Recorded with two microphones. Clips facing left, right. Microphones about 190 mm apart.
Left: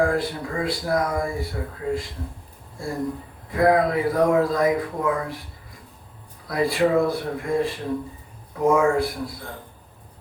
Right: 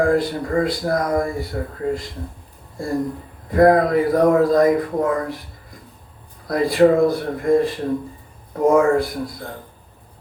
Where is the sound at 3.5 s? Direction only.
45° right (ahead or behind).